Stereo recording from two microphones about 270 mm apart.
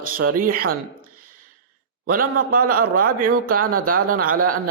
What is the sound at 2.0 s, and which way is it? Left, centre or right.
A man's voice, right.